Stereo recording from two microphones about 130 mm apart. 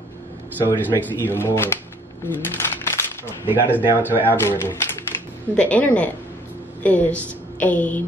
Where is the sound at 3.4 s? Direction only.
15° right (ahead or behind).